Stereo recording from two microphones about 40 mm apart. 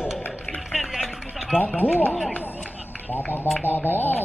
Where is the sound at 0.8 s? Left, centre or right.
Centre.